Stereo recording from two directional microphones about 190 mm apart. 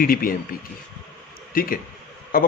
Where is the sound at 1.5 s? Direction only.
50° left (ahead or behind).